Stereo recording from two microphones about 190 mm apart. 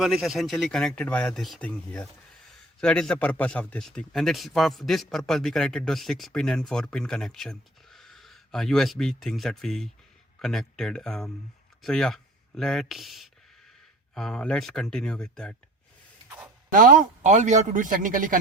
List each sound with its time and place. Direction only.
0.0 s speech: centre (ahead or behind)
16.7 s speech: 45° right (ahead or behind)